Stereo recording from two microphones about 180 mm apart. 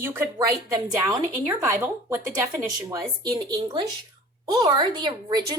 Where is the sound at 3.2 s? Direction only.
25° right (ahead or behind).